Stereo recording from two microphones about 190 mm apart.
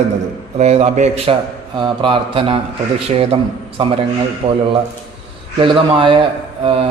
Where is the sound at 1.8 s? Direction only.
25° right (ahead or behind).